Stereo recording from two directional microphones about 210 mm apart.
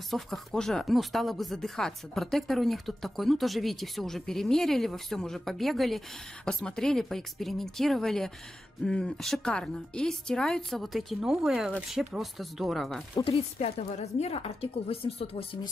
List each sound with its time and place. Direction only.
0.1 s speech: centre (ahead or behind)
13.1 s speech: 25° left (ahead or behind)